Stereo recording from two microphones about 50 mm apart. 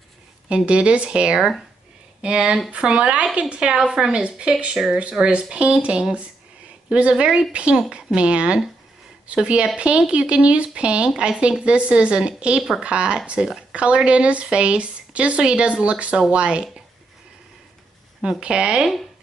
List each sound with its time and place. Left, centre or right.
0.5 s speech: right
18.4 s speech: centre